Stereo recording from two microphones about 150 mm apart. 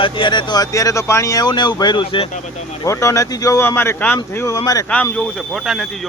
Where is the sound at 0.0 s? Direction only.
30° left (ahead or behind).